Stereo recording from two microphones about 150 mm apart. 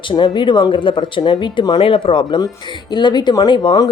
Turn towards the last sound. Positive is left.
turn(degrees=30)  # may be behind; listen again after turning